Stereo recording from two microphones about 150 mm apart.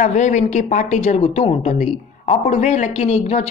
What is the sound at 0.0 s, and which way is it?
A woman's voice, 55° left (ahead or behind).